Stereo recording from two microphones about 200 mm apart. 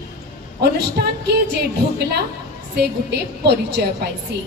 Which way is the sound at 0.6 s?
55° right (ahead or behind).